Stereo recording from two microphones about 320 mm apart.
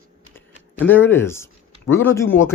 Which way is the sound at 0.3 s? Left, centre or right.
Centre.